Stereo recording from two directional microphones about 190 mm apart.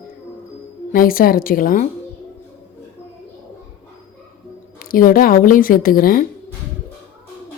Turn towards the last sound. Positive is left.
turn(degrees=50)  # may be behind; listen again after turning